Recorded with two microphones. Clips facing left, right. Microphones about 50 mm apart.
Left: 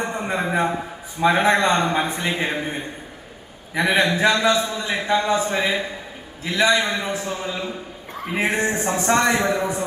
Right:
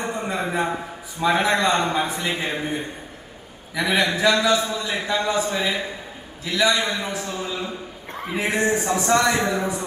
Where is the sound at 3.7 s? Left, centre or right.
Left.